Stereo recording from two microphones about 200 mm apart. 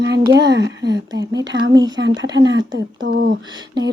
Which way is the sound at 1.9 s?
65° right (ahead or behind).